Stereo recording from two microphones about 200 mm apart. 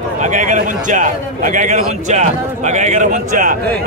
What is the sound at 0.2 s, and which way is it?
A man's voice, 40° right (ahead or behind).